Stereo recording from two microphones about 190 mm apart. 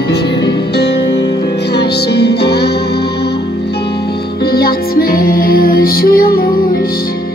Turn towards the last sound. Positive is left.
turn(degrees=50)  # may be behind; listen again after turning